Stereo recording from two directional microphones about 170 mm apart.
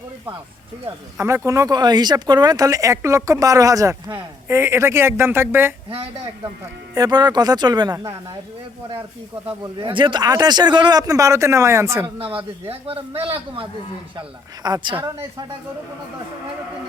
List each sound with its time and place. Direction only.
1.2 s speech: 15° right (ahead or behind)
6.9 s speech: 25° right (ahead or behind)
9.8 s speech: 30° right (ahead or behind)
14.2 s speech: 25° right (ahead or behind)